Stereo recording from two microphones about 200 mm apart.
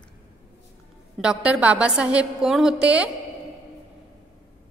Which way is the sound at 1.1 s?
5° right (ahead or behind).